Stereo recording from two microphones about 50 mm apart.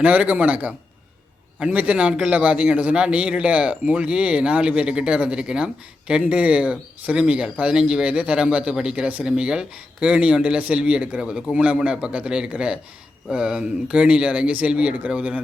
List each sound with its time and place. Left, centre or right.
0.0 s a man's voice: right